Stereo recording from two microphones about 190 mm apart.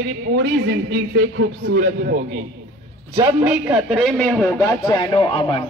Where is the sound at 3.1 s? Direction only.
5° right (ahead or behind).